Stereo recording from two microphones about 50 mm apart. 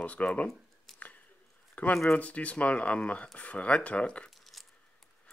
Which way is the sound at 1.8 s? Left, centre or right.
Left.